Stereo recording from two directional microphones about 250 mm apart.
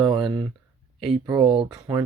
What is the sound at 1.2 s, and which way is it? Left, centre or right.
Speech, centre.